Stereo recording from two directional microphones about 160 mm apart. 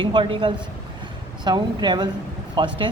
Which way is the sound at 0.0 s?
30° right (ahead or behind).